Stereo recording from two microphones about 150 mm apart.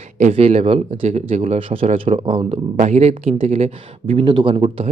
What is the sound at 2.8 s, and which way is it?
Speech, 45° right (ahead or behind).